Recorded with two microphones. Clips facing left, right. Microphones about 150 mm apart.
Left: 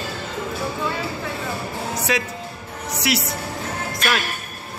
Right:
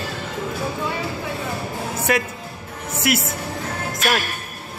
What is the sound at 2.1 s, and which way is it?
Speech, 55° right (ahead or behind).